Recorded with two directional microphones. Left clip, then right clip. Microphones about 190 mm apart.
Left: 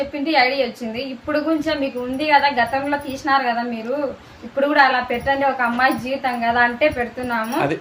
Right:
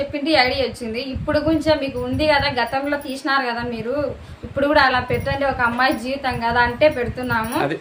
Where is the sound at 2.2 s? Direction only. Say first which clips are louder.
Left 2 dB; 25° right (ahead or behind).